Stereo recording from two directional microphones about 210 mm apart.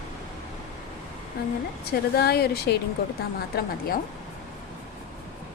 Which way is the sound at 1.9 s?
50° left (ahead or behind).